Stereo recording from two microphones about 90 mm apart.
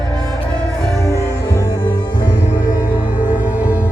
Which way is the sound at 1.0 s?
35° left (ahead or behind).